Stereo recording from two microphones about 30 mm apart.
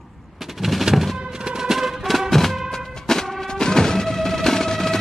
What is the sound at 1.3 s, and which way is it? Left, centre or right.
Music, right.